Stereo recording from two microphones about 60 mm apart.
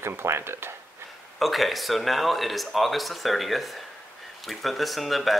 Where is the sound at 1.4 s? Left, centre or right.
Centre.